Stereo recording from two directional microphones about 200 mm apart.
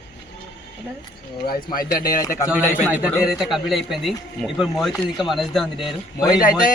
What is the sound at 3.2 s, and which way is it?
Speech, centre (ahead or behind).